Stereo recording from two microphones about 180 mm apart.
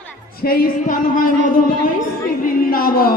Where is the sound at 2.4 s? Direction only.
50° left (ahead or behind).